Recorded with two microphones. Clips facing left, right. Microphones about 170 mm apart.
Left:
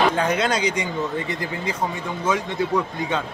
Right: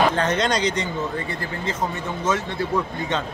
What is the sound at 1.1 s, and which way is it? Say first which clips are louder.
A man's voice: left 2 dB; 20° left (ahead or behind).